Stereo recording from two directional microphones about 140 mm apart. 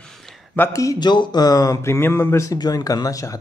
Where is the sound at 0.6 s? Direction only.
25° left (ahead or behind).